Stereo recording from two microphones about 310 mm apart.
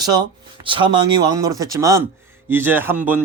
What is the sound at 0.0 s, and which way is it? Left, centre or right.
Speech, centre.